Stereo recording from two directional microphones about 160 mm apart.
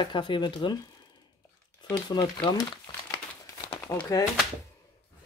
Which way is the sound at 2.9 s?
25° left (ahead or behind).